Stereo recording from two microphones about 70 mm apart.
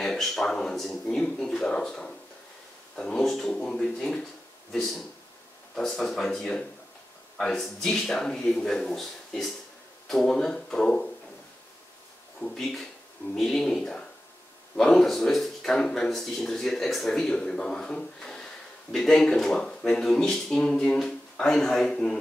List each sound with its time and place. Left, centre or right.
0.0 s a man's voice: centre
5.8 s a man's voice: centre
12.4 s speech: left
13.3 s speech: centre